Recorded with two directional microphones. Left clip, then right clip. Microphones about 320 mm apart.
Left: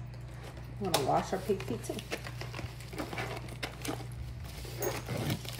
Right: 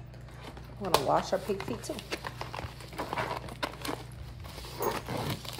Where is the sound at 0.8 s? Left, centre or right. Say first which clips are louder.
Right 3 dB; centre.